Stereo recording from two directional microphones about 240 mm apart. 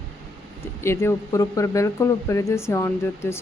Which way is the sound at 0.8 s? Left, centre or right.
Centre.